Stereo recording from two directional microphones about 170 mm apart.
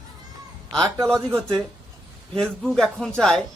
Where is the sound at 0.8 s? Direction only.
15° right (ahead or behind).